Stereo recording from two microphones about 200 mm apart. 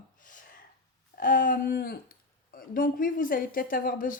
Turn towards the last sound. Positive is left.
turn(degrees=45)  # may be behind; listen again after turning